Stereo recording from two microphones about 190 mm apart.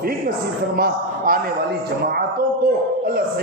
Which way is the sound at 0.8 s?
50° right (ahead or behind).